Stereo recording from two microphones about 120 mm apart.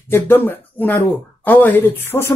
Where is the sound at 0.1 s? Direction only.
20° left (ahead or behind).